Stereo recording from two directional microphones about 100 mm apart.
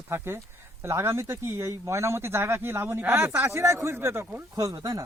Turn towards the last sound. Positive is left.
turn(degrees=-35)  # may be behind; listen again after turning